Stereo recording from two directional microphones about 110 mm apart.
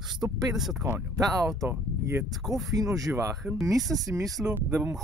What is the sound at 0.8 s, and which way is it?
Speech, 35° right (ahead or behind).